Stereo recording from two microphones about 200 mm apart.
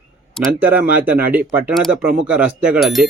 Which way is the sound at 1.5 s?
5° right (ahead or behind).